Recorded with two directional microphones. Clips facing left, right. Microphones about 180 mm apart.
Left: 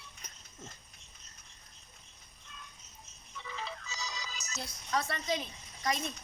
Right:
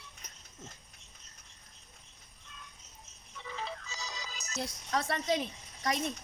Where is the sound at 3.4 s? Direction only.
45° right (ahead or behind).